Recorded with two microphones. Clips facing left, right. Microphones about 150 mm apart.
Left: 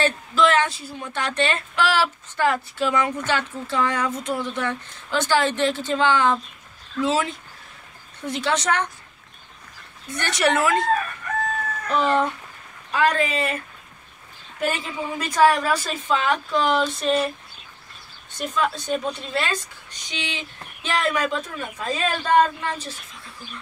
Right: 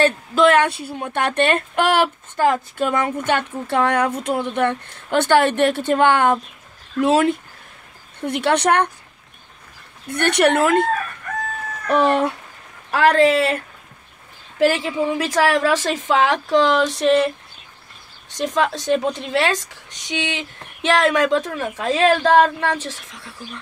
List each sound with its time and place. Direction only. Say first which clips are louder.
0.0 s a woman's voice: right 5 dB; 55° right (ahead or behind)
10.0 s a woman's voice: right 6 dB; 60° right (ahead or behind)
11.9 s speech: right 4 dB; 70° right (ahead or behind)
12.9 s a woman's voice: right 7 dB; 90° right
14.6 s a woman's voice: right 8 dB; 85° right
18.3 s a woman's voice: right 4 dB; 90° right